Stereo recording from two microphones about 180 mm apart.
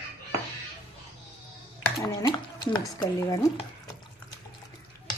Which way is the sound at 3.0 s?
20° left (ahead or behind).